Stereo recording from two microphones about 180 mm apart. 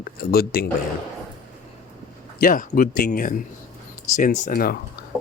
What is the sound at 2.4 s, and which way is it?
Speech, 50° left (ahead or behind).